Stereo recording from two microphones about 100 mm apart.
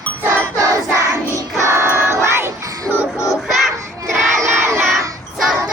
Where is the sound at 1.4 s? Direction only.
30° right (ahead or behind).